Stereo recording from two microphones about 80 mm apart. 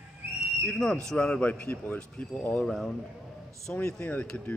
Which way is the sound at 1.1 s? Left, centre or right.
Centre.